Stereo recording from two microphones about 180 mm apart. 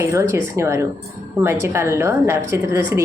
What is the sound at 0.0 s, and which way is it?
A woman's voice, 15° right (ahead or behind).